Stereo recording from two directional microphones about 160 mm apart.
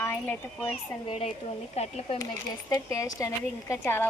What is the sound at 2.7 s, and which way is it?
A woman's voice, 20° left (ahead or behind).